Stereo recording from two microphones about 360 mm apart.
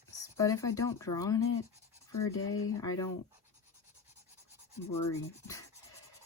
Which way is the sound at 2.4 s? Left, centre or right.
Left.